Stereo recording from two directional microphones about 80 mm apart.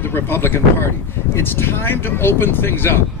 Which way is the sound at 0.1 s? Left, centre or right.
Left.